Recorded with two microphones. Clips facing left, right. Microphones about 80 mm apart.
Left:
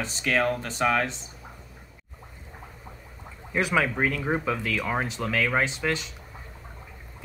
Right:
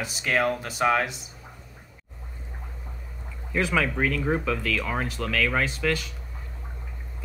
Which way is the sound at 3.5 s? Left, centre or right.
Centre.